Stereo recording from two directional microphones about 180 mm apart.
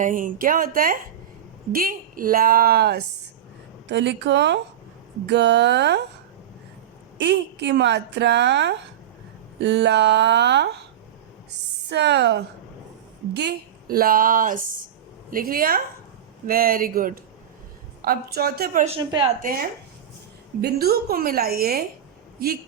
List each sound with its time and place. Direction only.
0.0 s speech: 45° right (ahead or behind)
3.8 s a woman's voice: 75° right (ahead or behind)
7.2 s a woman's voice: 80° right
11.9 s a woman's voice: 70° right (ahead or behind); by 18.9 s 55° right (ahead or behind)
18.9 s a woman's voice: 25° right (ahead or behind)
19.4 s a woman's voice: 50° right (ahead or behind)